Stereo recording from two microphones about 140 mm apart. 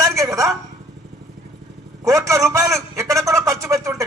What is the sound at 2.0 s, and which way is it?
A man's voice, 25° right (ahead or behind).